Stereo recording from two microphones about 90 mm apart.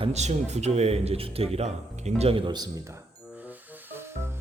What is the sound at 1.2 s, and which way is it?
A man's voice, 90° right.